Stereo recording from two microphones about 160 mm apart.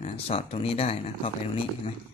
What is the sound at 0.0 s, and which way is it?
Speech, 40° left (ahead or behind).